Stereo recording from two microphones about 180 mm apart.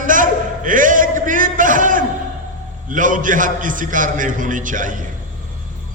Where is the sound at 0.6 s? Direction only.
45° right (ahead or behind).